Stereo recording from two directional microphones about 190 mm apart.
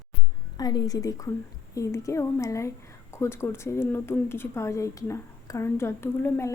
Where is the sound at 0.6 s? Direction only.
20° left (ahead or behind).